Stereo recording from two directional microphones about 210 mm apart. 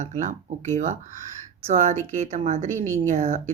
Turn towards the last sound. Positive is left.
turn(degrees=-35)  # may be behind; listen again after turning